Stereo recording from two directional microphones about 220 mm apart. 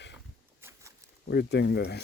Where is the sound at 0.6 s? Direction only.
10° right (ahead or behind).